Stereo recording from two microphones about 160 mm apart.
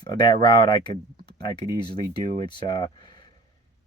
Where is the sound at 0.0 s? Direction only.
30° left (ahead or behind).